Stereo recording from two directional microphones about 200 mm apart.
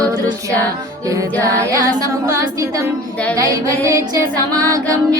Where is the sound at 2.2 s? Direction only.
15° right (ahead or behind).